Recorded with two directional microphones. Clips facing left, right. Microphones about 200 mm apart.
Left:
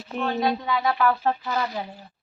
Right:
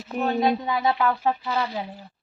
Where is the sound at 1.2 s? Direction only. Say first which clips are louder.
Even; 5° right (ahead or behind).